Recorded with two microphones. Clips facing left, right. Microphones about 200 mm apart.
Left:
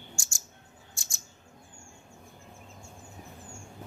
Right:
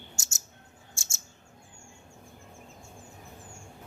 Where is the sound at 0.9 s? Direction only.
25° right (ahead or behind).